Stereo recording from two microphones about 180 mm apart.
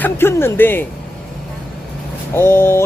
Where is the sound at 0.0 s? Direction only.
15° left (ahead or behind).